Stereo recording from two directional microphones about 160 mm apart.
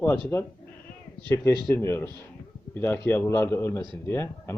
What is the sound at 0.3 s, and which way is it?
Speech, 15° left (ahead or behind).